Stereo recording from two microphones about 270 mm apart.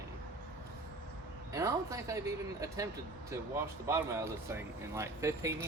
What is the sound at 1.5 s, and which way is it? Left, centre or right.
Speech, centre.